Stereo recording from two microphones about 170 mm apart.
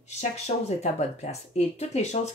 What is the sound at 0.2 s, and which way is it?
Speech, 40° left (ahead or behind).